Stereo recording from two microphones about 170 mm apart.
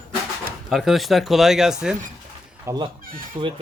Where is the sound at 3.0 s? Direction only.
55° right (ahead or behind).